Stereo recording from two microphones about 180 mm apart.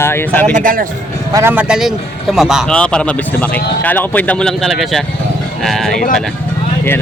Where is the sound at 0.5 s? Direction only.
50° right (ahead or behind).